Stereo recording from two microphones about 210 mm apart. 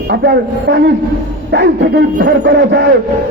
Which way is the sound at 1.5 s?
55° right (ahead or behind).